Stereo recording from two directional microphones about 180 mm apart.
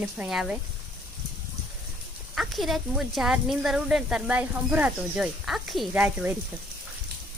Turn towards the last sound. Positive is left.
turn(degrees=-10)  # may be behind; listen again after turning